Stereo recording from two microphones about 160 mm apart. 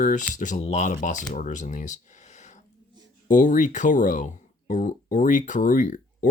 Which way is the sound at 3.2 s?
50° left (ahead or behind).